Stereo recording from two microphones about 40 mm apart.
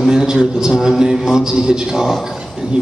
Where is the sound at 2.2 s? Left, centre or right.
Centre.